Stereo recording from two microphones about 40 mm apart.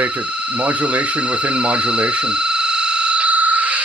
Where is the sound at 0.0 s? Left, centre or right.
Right.